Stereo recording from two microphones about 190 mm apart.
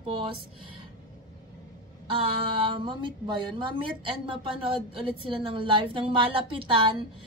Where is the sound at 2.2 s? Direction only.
25° right (ahead or behind).